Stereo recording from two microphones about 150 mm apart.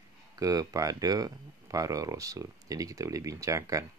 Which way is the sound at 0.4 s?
25° right (ahead or behind).